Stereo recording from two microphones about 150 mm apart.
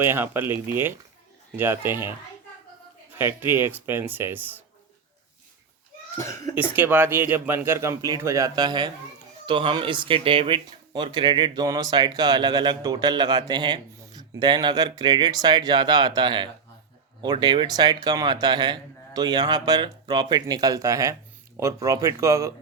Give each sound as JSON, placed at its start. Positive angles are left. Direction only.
{"t": 0.0, "sound": "speech", "side_deg": -15}
{"t": 3.2, "sound": "speech", "side_deg": -15}
{"t": 6.1, "sound": "a child's voice", "side_deg": 20}
{"t": 6.6, "sound": "speech", "side_deg": -15}